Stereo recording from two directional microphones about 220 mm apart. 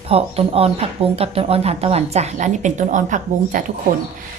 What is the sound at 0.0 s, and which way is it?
A woman's voice, 25° right (ahead or behind).